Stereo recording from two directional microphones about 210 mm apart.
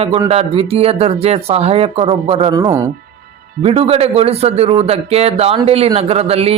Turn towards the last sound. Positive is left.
turn(degrees=-30)  # may be behind; listen again after turning